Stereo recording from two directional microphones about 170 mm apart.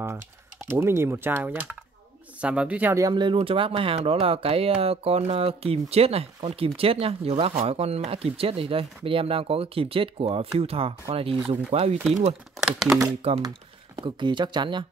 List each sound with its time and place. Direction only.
0.7 s speech: 15° right (ahead or behind); by 12.4 s 40° right (ahead or behind)
12.7 s speech: centre (ahead or behind)
13.9 s speech: 25° right (ahead or behind)